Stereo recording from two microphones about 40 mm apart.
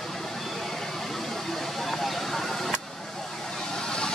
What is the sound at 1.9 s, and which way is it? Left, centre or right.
Vehicle, centre.